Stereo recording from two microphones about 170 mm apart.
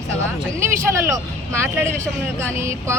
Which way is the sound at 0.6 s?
15° right (ahead or behind).